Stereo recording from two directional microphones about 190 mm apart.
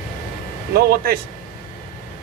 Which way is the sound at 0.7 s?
55° right (ahead or behind).